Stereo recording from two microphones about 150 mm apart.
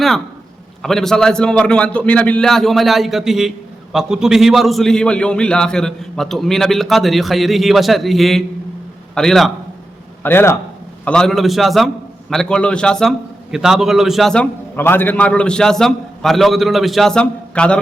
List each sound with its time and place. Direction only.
0.8 s a man's voice: 5° left (ahead or behind)
10.2 s a man's voice: 15° left (ahead or behind)
11.0 s a man's voice: 5° left (ahead or behind)
14.8 s a man's voice: 15° left (ahead or behind)